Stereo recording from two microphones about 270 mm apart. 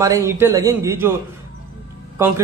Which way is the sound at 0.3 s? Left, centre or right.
Centre.